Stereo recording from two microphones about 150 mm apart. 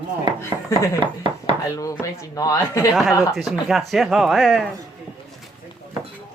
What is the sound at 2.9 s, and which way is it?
Speech, centre (ahead or behind).